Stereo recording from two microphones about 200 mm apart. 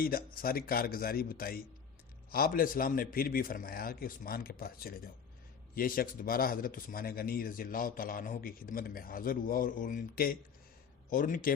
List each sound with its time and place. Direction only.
0.0 s a man's voice: 45° left (ahead or behind)